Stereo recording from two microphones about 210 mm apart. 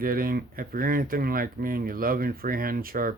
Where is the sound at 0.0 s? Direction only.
45° right (ahead or behind).